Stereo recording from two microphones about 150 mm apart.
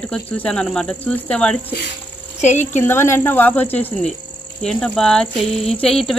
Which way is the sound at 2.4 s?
50° left (ahead or behind).